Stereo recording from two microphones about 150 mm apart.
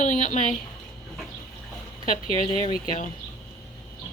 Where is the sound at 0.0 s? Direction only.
55° left (ahead or behind).